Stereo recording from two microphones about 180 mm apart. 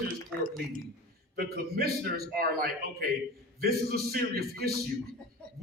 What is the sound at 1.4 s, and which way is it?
A man's voice, 60° right (ahead or behind).